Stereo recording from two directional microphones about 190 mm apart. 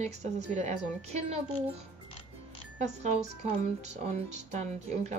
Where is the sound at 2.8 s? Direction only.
35° right (ahead or behind).